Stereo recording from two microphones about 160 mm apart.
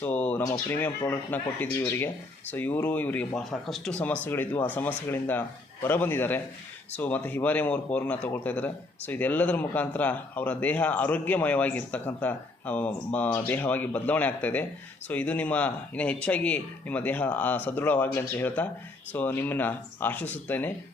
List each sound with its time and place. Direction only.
0.0 s speech: 10° left (ahead or behind)